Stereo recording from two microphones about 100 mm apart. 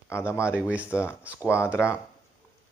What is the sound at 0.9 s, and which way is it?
Speech, 25° left (ahead or behind).